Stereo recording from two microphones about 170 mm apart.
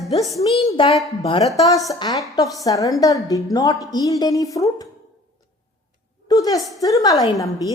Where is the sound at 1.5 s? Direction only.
20° left (ahead or behind).